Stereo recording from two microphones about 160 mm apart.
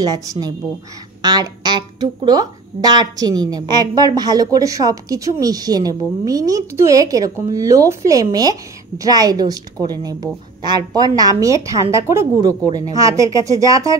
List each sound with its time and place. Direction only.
0.0 s speech: 25° right (ahead or behind)